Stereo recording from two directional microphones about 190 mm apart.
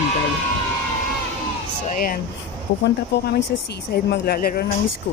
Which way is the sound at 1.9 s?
50° left (ahead or behind).